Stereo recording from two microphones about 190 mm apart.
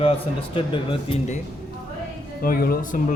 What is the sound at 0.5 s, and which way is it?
Speech, 25° left (ahead or behind).